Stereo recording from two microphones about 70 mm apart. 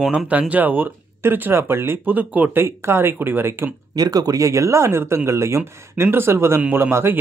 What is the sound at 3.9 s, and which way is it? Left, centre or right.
Speech, right.